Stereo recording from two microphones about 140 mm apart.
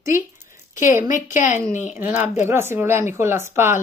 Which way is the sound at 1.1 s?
65° left (ahead or behind).